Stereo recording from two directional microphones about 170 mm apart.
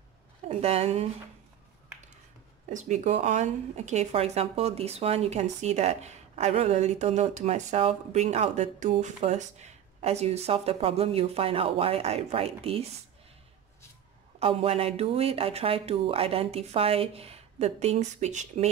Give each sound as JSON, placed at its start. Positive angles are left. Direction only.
{"t": 0.5, "sound": "speech", "side_deg": -40}
{"t": 2.7, "sound": "speech", "side_deg": -45}
{"t": 14.4, "sound": "speech", "side_deg": -35}